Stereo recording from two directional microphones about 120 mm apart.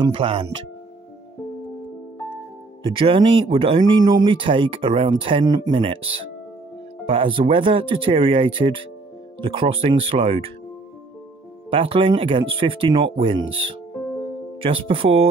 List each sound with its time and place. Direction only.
0.0 s speech: 50° right (ahead or behind)
2.8 s speech: 45° right (ahead or behind)
7.1 s speech: 45° right (ahead or behind)
11.7 s speech: 50° right (ahead or behind)